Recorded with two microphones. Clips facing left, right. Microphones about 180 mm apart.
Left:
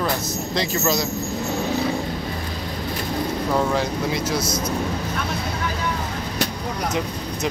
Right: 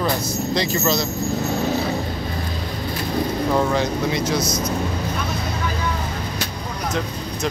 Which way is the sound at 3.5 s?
5° left (ahead or behind).